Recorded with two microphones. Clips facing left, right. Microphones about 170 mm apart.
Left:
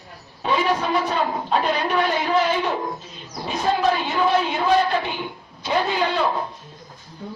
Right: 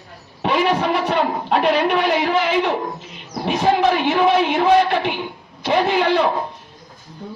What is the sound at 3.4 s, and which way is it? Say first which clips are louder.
Speech: right 4 dB; 75° right (ahead or behind).